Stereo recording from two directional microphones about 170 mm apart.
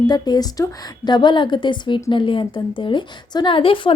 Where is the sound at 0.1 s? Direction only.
25° left (ahead or behind).